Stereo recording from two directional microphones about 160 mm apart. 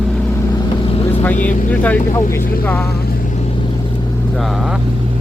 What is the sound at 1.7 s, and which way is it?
Speech, 10° left (ahead or behind).